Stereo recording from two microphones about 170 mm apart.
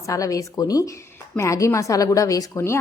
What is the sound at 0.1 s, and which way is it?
A woman's voice, 20° left (ahead or behind).